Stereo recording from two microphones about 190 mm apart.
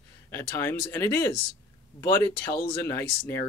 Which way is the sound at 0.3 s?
10° left (ahead or behind).